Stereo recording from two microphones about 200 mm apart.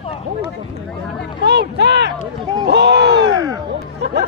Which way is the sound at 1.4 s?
60° right (ahead or behind).